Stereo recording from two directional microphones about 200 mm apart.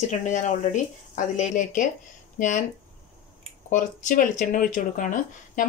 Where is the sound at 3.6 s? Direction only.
40° left (ahead or behind).